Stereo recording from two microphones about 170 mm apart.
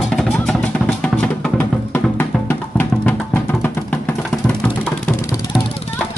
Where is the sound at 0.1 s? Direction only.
5° left (ahead or behind).